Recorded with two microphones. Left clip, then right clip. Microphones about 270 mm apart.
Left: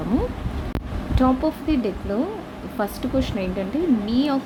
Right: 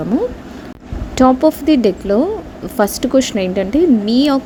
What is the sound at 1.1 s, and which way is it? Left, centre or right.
A woman's voice, right.